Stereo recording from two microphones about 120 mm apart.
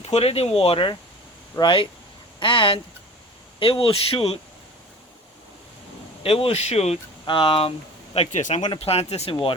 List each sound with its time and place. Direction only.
0.0 s speech: 60° left (ahead or behind)
6.2 s speech: 55° left (ahead or behind)
7.3 s speech: 45° left (ahead or behind)
8.1 s speech: 70° left (ahead or behind); by 8.7 s 90° left
8.7 s speech: 55° left (ahead or behind)
9.3 s speech: 50° left (ahead or behind)